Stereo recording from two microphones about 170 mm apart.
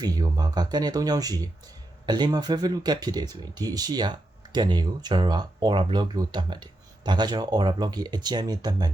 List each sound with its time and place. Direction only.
0.0 s speech: 20° right (ahead or behind)